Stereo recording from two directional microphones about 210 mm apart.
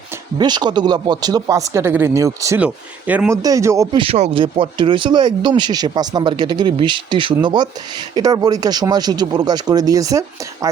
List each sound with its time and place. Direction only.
0.3 s speech: 20° right (ahead or behind)